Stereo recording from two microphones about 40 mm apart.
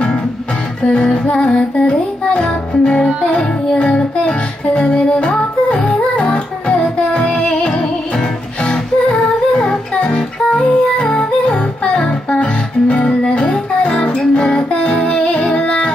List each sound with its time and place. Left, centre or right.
0.8 s music: left